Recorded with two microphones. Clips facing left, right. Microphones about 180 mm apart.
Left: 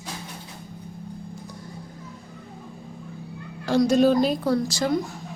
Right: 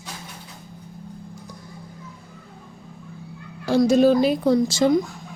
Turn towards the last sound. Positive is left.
turn(degrees=-20)  # may be behind; listen again after turning